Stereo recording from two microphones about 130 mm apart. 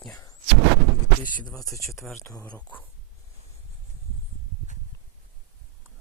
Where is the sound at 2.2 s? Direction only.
20° left (ahead or behind).